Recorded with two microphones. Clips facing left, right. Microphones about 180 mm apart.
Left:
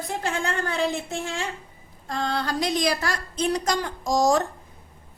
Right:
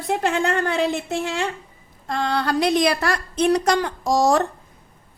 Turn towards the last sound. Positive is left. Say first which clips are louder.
# right 3 dB
turn(degrees=-65)  # may be behind; listen again after turning